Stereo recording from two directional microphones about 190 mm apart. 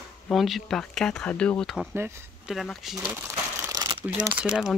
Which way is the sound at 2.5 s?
Centre (ahead or behind).